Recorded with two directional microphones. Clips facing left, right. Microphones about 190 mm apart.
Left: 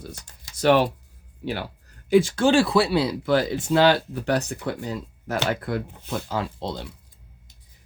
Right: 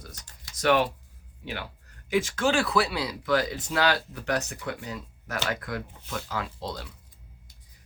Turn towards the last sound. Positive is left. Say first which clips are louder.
# left 5 dB
turn(degrees=25)  # may be behind; listen again after turning